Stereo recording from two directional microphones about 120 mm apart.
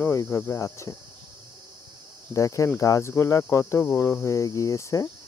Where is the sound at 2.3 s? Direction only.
25° left (ahead or behind).